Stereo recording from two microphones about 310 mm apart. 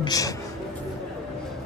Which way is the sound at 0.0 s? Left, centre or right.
Centre.